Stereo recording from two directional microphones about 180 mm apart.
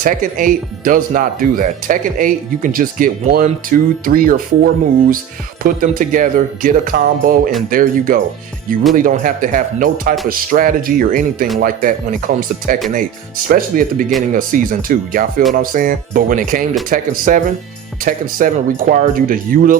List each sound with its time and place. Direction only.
0.0 s speech: 45° right (ahead or behind)